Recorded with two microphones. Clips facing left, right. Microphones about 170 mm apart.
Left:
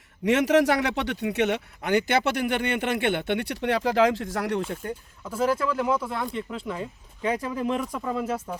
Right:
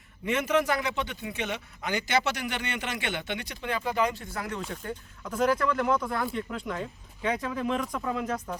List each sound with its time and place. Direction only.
0.3 s speech: 75° left (ahead or behind)
5.2 s speech: 5° left (ahead or behind)